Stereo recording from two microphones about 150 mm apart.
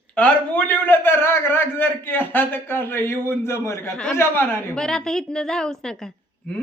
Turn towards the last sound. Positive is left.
turn(degrees=5)  # may be behind; listen again after turning